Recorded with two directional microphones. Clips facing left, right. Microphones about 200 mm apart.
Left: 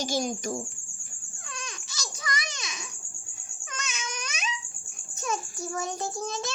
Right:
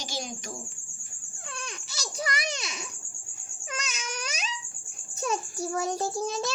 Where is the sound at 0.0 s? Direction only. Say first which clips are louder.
Left 8 dB; 45° left (ahead or behind).